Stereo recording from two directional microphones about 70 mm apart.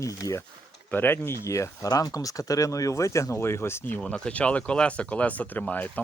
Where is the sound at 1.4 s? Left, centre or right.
Left.